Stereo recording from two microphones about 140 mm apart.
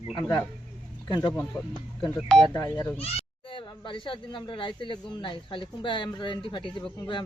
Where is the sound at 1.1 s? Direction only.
35° left (ahead or behind).